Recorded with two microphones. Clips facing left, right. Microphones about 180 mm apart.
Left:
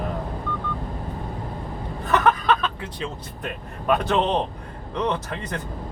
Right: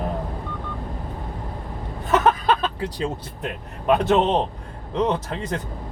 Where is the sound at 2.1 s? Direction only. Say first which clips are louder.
Right 1 dB; 25° right (ahead or behind).